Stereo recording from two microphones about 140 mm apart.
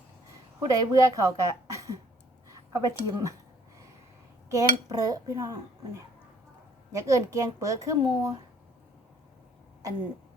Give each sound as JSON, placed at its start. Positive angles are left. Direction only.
{"t": 0.6, "sound": "speech", "side_deg": -25}
{"t": 4.4, "sound": "speech", "side_deg": -25}